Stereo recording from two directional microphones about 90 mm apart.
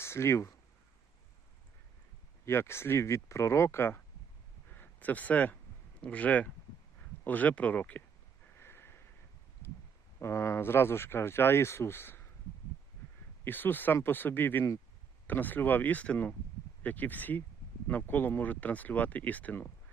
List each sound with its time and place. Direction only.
0.0 s speech: 30° left (ahead or behind)
2.4 s speech: 30° left (ahead or behind)
8.5 s a sound: 25° left (ahead or behind)
10.2 s speech: 30° left (ahead or behind)
13.4 s speech: 20° left (ahead or behind)